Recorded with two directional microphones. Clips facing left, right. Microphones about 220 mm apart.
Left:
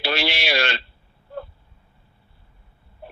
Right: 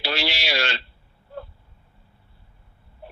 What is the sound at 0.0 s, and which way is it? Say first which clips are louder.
Speech: left 3 dB; 55° left (ahead or behind).